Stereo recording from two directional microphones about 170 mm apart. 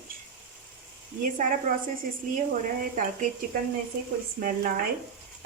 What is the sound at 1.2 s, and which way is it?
Speech, 50° right (ahead or behind).